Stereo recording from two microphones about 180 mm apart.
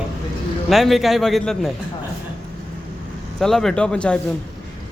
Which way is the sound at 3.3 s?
5° left (ahead or behind).